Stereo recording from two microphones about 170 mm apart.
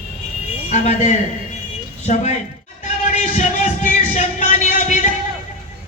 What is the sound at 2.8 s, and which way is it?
Music, 45° left (ahead or behind).